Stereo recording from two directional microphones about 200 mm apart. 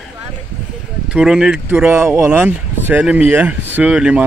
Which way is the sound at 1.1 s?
5° right (ahead or behind).